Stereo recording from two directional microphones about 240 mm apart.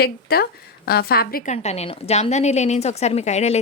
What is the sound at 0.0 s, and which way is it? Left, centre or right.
A woman's voice, left.